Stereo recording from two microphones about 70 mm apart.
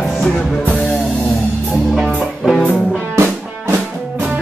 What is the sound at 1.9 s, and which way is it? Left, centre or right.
Music, centre.